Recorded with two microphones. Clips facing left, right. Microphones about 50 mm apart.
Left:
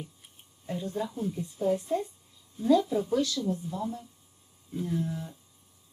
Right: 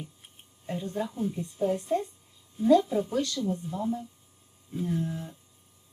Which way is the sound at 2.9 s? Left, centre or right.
Centre.